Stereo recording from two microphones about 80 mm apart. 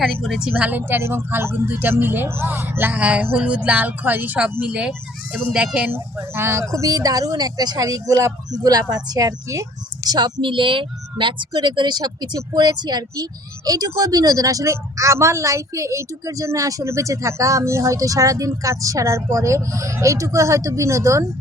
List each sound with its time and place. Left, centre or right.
0.0 s a woman's voice: centre
0.5 s speech: right
5.3 s speech: centre
5.9 s speech: right
10.1 s a woman's voice: right